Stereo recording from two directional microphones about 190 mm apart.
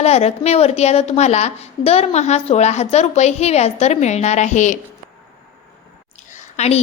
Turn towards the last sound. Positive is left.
turn(degrees=35)  # may be behind; listen again after turning